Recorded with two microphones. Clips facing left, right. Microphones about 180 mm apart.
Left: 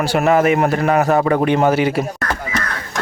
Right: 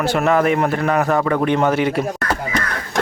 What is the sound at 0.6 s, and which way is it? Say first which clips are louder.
Speech: left 2 dB; 20° left (ahead or behind).